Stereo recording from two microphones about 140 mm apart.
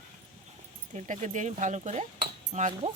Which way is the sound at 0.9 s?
55° right (ahead or behind).